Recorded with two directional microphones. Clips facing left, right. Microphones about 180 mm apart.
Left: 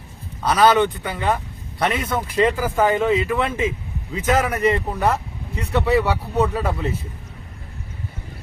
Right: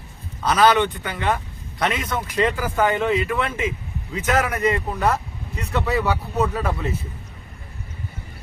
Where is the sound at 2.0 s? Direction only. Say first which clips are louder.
Left 3 dB; 30° left (ahead or behind).